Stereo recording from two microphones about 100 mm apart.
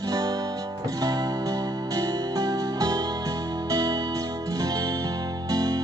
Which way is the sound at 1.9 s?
40° right (ahead or behind).